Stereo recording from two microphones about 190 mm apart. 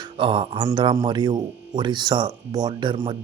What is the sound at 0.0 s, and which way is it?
Speech, 25° right (ahead or behind).